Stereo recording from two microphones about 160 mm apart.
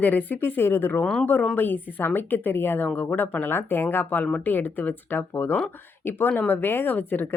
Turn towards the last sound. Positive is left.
turn(degrees=10)  # may be behind; listen again after turning